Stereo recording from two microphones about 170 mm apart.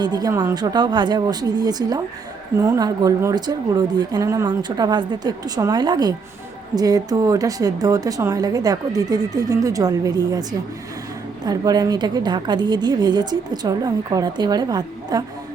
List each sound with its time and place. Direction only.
0.0 s a woman's voice: 25° right (ahead or behind)
11.4 s a woman's voice: 25° right (ahead or behind)